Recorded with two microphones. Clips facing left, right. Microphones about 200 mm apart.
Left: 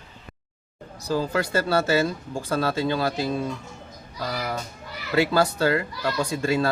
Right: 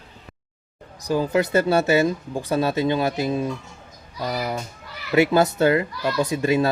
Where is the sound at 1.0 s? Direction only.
15° right (ahead or behind).